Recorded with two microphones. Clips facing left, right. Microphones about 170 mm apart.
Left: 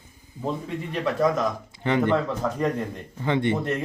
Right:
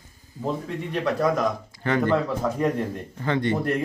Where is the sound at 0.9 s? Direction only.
Centre (ahead or behind).